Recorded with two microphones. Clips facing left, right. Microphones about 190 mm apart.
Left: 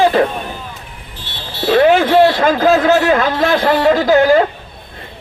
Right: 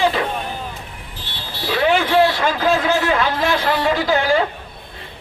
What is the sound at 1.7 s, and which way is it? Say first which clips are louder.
A man's voice: left 6 dB; 45° left (ahead or behind).